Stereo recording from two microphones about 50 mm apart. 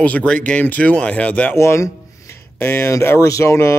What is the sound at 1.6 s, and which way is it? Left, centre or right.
Speech, left.